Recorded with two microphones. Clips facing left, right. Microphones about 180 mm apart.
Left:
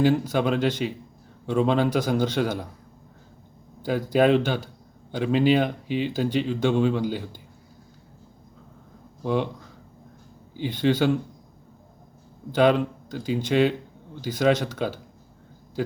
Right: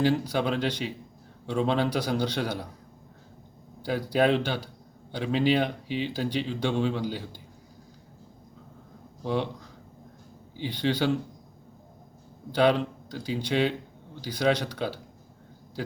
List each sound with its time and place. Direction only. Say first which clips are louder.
0.0 s speech: left 4 dB; 50° left (ahead or behind)
3.8 s speech: left 4 dB; 50° left (ahead or behind)
9.2 s speech: left 3 dB; 50° left (ahead or behind)
12.5 s speech: left 3 dB; 50° left (ahead or behind)